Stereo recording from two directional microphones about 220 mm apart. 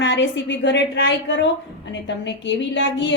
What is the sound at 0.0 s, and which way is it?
Speech, 55° left (ahead or behind).